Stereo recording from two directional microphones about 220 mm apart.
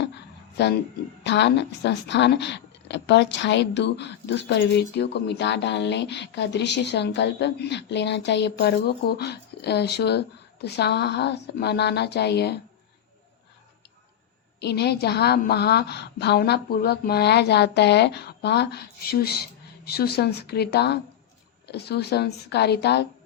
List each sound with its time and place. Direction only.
0.6 s a woman's voice: 50° left (ahead or behind)
14.6 s a woman's voice: 50° left (ahead or behind)